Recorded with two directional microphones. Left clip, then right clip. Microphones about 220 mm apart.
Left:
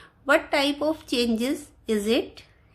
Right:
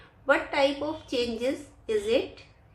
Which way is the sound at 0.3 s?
45° left (ahead or behind).